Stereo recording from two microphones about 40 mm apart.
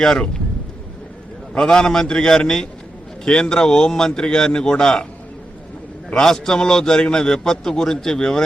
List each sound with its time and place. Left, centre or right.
1.5 s a man's voice: centre
6.1 s a man's voice: centre